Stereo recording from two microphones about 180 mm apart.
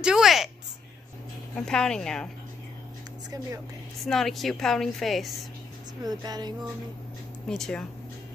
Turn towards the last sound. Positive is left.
turn(degrees=0)  # may be behind; listen again after turning